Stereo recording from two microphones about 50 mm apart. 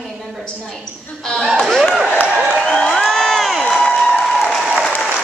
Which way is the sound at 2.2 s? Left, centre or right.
Centre.